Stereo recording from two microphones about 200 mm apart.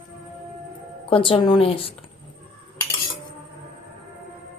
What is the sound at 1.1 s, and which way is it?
Speech, 25° left (ahead or behind).